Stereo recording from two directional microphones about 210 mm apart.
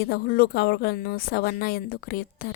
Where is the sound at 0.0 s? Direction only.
45° left (ahead or behind).